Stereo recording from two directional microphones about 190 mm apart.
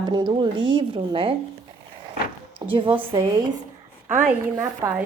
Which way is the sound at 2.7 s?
25° right (ahead or behind).